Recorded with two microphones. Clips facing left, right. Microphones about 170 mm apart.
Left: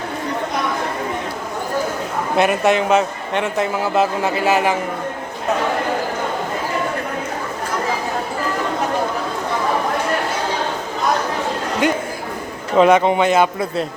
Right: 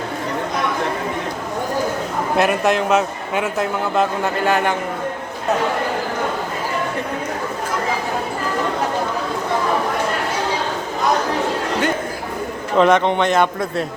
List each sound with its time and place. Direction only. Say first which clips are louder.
2.3 s a man's voice: left 1 dB; centre (ahead or behind)
12.7 s a man's voice: left 2 dB; 5° left (ahead or behind)